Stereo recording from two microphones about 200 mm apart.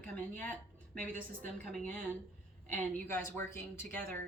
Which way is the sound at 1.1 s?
40° right (ahead or behind).